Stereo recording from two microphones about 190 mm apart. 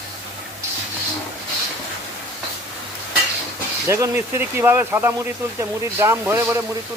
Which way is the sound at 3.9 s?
15° right (ahead or behind).